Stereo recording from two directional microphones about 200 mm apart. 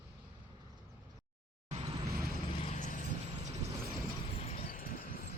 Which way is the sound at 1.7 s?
30° right (ahead or behind).